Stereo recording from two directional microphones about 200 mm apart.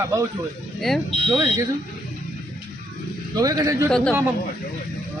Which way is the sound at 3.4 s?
20° right (ahead or behind).